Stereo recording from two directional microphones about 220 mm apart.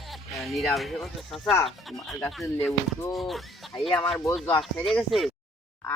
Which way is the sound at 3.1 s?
Centre (ahead or behind).